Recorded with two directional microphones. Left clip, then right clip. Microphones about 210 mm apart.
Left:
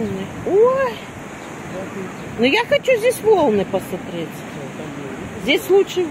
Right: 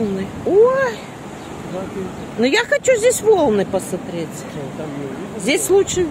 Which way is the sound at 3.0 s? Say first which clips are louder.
Right 1 dB; 10° right (ahead or behind).